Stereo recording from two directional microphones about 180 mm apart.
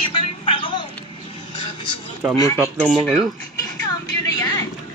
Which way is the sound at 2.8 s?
5° left (ahead or behind).